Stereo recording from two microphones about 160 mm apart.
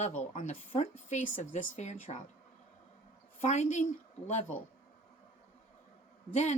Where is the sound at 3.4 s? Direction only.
45° left (ahead or behind).